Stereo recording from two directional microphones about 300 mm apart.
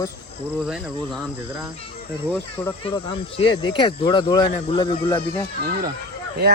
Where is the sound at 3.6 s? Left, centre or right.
Centre.